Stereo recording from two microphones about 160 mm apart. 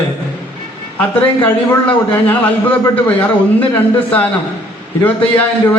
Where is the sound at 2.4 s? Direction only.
10° left (ahead or behind).